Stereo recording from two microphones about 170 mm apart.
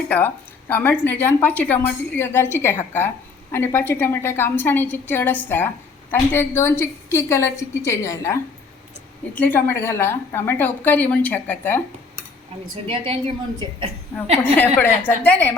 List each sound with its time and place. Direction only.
0.7 s a woman's voice: 10° left (ahead or behind)
12.7 s a woman's voice: 35° right (ahead or behind)
14.4 s a woman's voice: 10° left (ahead or behind)